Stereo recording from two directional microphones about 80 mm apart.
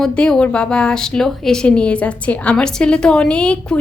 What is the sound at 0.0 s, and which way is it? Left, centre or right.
A woman's voice, centre.